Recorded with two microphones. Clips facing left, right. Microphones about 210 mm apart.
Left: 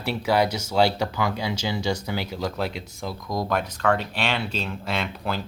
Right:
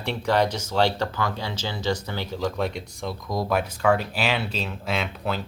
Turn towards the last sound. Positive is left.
turn(degrees=0)  # may be behind; listen again after turning